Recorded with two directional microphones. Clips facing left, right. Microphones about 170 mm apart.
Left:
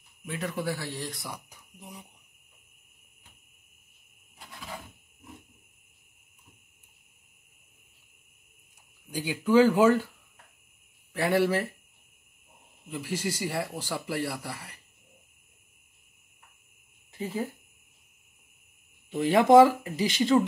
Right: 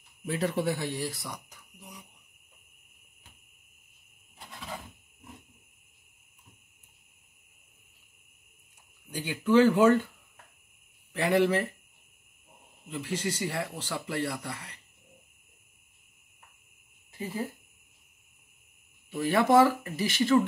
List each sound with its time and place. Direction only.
0.3 s speech: 30° right (ahead or behind); by 1.1 s 15° right (ahead or behind)
1.1 s speech: centre (ahead or behind)
1.8 s speech: 25° left (ahead or behind)
9.1 s a man's voice: 10° left (ahead or behind)
11.1 s speech: 5° left (ahead or behind)
12.9 s a man's voice: 10° left (ahead or behind)
19.0 s a man's voice: 20° left (ahead or behind)